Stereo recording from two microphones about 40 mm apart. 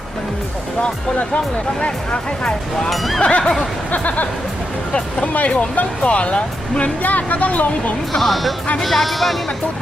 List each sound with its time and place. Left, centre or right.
2.9 s speech: centre
3.2 s neigh: left
3.6 s speech: left
7.0 s speech: left
8.1 s speech: centre